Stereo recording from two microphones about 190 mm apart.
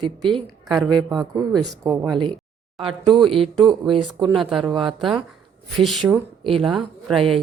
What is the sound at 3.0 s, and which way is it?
Speech, 25° right (ahead or behind).